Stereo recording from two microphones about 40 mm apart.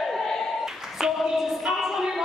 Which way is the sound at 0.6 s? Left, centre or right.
Centre.